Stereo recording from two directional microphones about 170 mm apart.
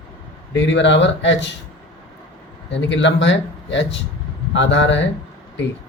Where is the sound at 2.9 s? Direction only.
90° left.